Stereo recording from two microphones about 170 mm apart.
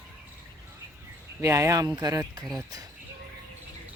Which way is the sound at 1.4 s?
15° right (ahead or behind).